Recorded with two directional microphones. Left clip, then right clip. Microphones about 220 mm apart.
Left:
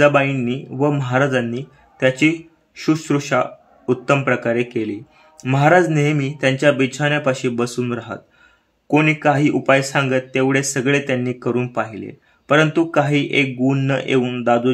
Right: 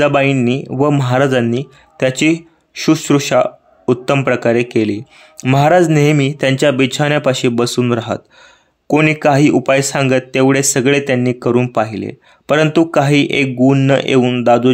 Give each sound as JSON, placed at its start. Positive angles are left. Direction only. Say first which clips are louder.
{"t": 0.0, "sound": "speech", "louder": "right 2 dB", "side_deg": -35}